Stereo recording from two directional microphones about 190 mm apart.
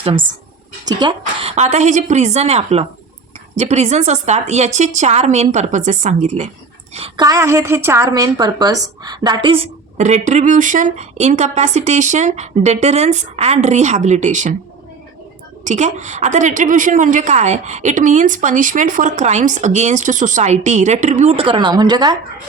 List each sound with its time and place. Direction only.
0.0 s a woman's voice: 30° right (ahead or behind)
7.3 s a woman's voice: 15° right (ahead or behind)
10.0 s a woman's voice: 40° right (ahead or behind)
15.6 s a woman's voice: 40° right (ahead or behind); by 22.2 s 20° right (ahead or behind)